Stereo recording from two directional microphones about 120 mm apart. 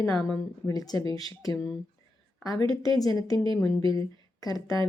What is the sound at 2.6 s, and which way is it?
Speech, 30° left (ahead or behind).